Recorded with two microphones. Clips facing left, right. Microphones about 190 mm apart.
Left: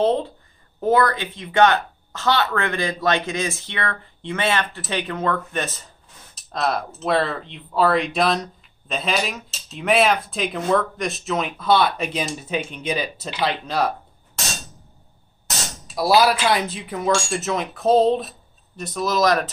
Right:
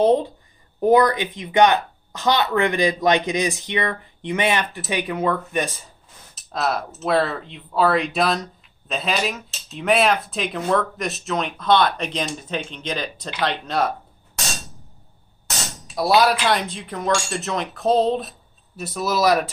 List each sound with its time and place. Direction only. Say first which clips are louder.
0.0 s speech: right 3 dB; 15° right (ahead or behind)
6.3 s speech: even; centre (ahead or behind)
15.9 s speech: even; centre (ahead or behind)